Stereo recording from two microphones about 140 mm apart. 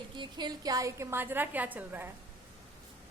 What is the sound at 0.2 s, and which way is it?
A woman's voice, 30° right (ahead or behind).